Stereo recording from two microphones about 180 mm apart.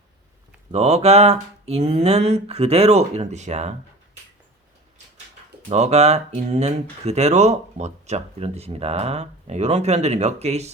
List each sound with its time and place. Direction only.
0.7 s speech: 35° right (ahead or behind)
5.6 s speech: 35° right (ahead or behind)